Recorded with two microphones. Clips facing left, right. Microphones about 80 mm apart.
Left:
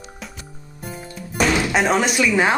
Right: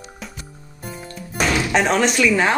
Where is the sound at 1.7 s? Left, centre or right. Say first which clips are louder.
Right 1 dB; centre.